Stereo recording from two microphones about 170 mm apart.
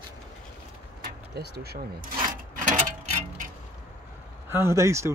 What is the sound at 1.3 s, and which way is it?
Speech, 70° right (ahead or behind).